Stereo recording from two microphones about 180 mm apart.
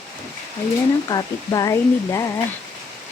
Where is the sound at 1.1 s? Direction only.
20° left (ahead or behind).